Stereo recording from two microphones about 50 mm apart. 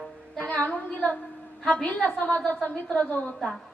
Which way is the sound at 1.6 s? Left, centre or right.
Left.